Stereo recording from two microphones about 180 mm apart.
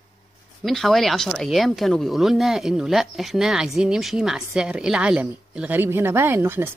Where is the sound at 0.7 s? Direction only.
Centre (ahead or behind).